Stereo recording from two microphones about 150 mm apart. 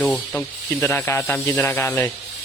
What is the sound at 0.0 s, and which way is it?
Speech, 10° left (ahead or behind).